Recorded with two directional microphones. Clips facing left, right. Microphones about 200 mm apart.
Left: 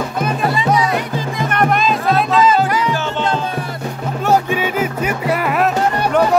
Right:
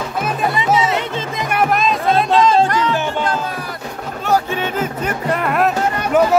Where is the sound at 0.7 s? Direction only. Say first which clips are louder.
Even; 25° right (ahead or behind).